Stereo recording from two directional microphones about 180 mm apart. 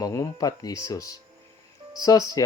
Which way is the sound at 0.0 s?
20° left (ahead or behind).